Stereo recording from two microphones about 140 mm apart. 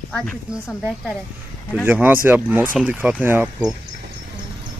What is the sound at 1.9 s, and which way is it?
Speech, 10° right (ahead or behind).